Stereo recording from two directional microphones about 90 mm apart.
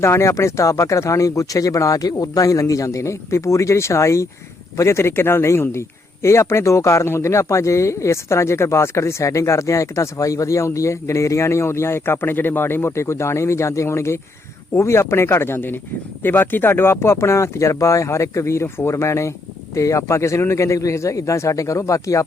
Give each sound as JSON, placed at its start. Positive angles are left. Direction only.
{"t": 0.0, "sound": "speech", "side_deg": 30}